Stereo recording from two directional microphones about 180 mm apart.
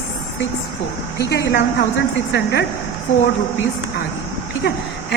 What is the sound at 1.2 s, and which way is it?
A woman's voice, 65° left (ahead or behind).